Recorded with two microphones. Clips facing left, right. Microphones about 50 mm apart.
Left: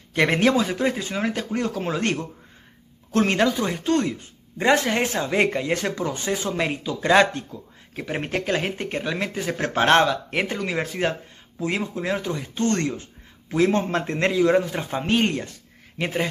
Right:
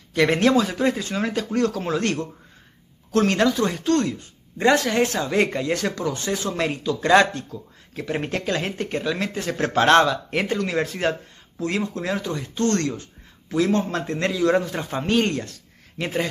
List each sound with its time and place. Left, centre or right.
0.1 s speech: left
3.3 s speech: centre
14.5 s speech: centre